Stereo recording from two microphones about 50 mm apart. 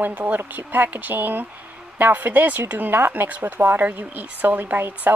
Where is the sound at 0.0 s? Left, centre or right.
Right.